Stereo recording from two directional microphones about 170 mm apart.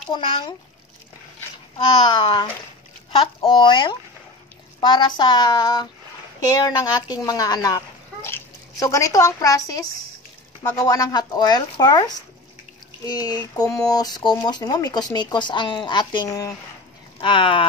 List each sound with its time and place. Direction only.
0.1 s speech: 30° left (ahead or behind)
2.0 s speech: 25° left (ahead or behind)